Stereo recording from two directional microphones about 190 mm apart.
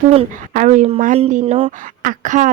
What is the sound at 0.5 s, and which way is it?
A woman's voice, 40° right (ahead or behind).